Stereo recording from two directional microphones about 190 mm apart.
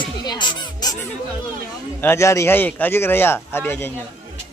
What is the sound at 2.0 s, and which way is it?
Speech, 15° left (ahead or behind).